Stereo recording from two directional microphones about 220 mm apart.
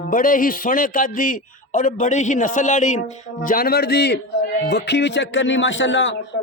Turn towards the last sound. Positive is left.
turn(degrees=55)  # may be behind; listen again after turning